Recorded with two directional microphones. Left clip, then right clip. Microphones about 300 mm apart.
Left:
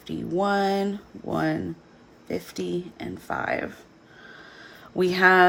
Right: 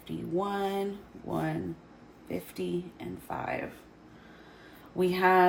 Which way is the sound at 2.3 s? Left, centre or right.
Left.